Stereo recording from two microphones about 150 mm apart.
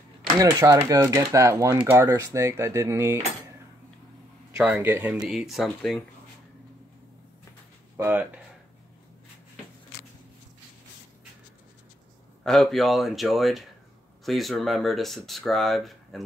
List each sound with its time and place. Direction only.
0.4 s speech: 25° right (ahead or behind)
4.6 s speech: 10° right (ahead or behind)
5.1 s speech: 5° right (ahead or behind)
8.0 s speech: 10° right (ahead or behind)
12.4 s speech: centre (ahead or behind)